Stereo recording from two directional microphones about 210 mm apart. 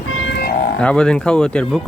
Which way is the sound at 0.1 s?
70° left (ahead or behind).